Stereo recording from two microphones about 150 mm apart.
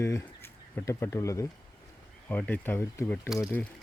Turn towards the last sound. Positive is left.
turn(degrees=20)  # may be behind; listen again after turning